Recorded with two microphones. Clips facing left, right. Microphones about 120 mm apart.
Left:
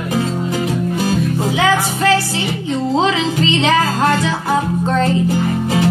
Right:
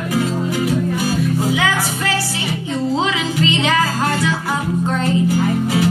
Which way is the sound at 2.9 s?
25° left (ahead or behind).